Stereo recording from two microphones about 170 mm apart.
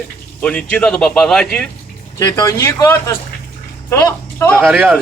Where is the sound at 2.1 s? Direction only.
20° left (ahead or behind).